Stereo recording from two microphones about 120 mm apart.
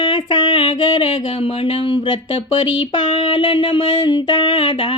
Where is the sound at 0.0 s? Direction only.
40° left (ahead or behind).